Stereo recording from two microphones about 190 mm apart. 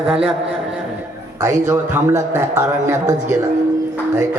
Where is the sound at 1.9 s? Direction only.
15° right (ahead or behind).